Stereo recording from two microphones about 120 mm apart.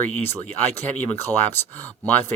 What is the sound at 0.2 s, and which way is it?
Speech, 15° left (ahead or behind).